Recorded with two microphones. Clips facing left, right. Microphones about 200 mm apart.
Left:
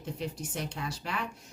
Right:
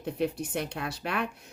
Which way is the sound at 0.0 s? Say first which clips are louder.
Right 7 dB; 60° right (ahead or behind).